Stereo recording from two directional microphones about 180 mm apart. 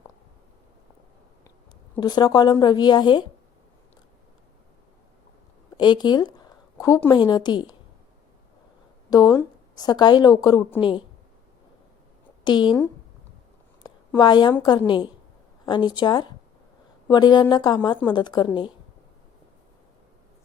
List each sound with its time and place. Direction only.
2.0 s speech: 25° left (ahead or behind)
5.7 s speech: 25° left (ahead or behind)
9.0 s speech: 20° left (ahead or behind)
12.5 s speech: 25° left (ahead or behind)
13.8 s a sound: 25° left (ahead or behind)
14.5 s speech: 25° left (ahead or behind)